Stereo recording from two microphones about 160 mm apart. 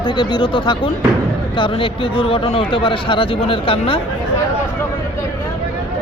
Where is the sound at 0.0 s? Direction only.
30° left (ahead or behind).